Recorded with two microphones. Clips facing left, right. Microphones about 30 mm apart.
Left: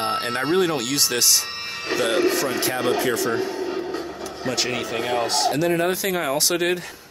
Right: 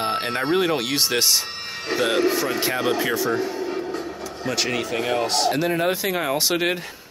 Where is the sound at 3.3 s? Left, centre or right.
Centre.